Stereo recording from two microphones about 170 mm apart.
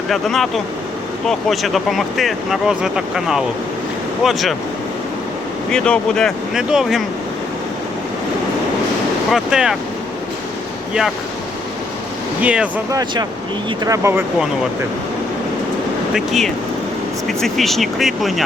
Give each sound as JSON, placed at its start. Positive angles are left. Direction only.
{"t": 0.1, "sound": "speech", "side_deg": 0}
{"t": 5.7, "sound": "speech", "side_deg": 5}
{"t": 9.3, "sound": "speech", "side_deg": -5}
{"t": 12.4, "sound": "speech", "side_deg": -10}
{"t": 12.9, "sound": "speech", "side_deg": -20}
{"t": 16.1, "sound": "speech", "side_deg": 0}